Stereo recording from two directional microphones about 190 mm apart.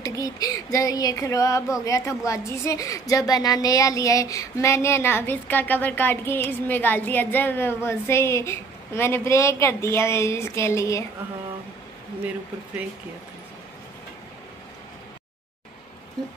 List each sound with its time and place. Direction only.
0.0 s a woman's voice: 20° left (ahead or behind)